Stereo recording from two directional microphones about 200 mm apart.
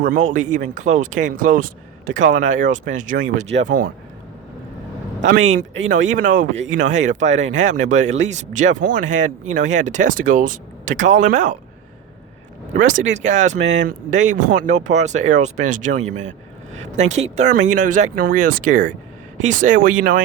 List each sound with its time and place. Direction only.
0.0 s speech: 40° right (ahead or behind)
5.2 s speech: 40° right (ahead or behind)
12.7 s speech: 40° right (ahead or behind)
13.6 s speech: 65° right (ahead or behind)
13.8 s speech: 40° right (ahead or behind)